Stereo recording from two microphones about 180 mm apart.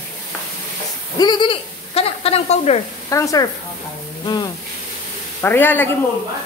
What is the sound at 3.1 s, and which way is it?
Speech, 20° left (ahead or behind).